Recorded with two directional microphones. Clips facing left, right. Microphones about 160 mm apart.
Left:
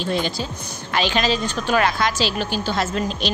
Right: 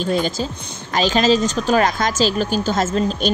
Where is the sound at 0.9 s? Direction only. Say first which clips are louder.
Right 5 dB; 40° right (ahead or behind).